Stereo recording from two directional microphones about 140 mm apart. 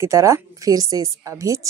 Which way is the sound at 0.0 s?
20° right (ahead or behind).